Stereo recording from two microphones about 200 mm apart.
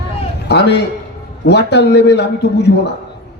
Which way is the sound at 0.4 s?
55° left (ahead or behind).